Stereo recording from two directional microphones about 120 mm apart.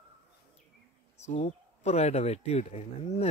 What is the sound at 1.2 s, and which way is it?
Speech, 70° left (ahead or behind).